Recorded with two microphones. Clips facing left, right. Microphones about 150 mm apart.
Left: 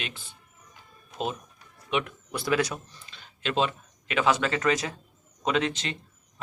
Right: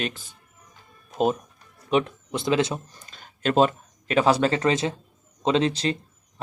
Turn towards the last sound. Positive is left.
turn(degrees=-35)  # may be behind; listen again after turning